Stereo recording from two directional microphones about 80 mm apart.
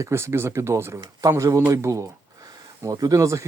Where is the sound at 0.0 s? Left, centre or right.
Right.